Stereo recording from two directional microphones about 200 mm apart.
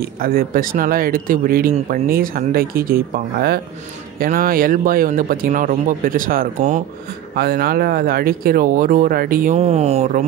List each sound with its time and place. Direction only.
0.2 s speech: 45° right (ahead or behind)
9.6 s speech: 30° right (ahead or behind)